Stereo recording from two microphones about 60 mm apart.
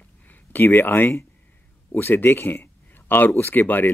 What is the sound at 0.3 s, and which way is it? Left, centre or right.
Speech, left.